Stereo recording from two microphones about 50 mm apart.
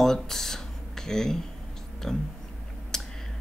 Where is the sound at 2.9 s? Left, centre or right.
Centre.